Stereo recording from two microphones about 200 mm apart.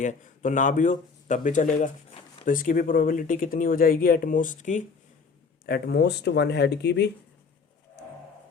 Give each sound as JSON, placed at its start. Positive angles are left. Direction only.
{"t": 0.0, "sound": "speech", "side_deg": 40}
{"t": 5.6, "sound": "speech", "side_deg": 50}